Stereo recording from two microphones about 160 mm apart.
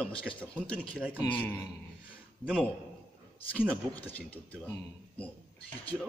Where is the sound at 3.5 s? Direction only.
10° left (ahead or behind).